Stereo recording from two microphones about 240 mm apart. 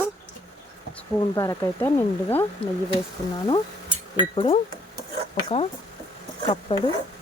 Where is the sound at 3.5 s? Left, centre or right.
Left.